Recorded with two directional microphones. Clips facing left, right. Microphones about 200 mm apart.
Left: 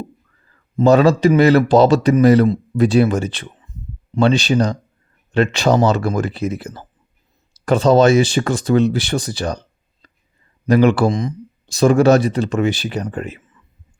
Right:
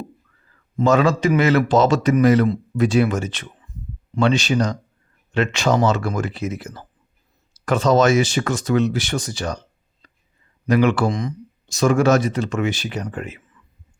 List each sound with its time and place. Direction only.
0.8 s speech: 35° left (ahead or behind)